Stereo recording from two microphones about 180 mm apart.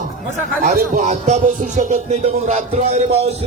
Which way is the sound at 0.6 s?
50° right (ahead or behind).